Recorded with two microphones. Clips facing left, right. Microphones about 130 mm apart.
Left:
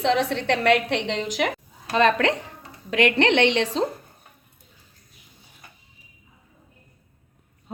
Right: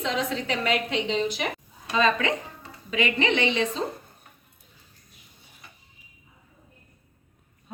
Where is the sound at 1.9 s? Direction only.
70° left (ahead or behind).